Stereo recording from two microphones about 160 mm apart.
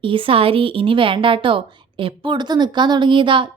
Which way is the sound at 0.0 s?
35° right (ahead or behind).